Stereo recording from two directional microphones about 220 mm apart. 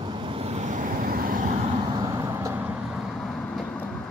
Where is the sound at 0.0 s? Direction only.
20° right (ahead or behind); by 1.6 s 40° right (ahead or behind).